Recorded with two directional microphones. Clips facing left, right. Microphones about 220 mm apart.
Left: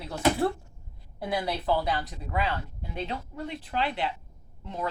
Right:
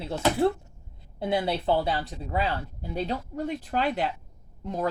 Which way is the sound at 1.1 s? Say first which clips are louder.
Right 4 dB; 25° right (ahead or behind).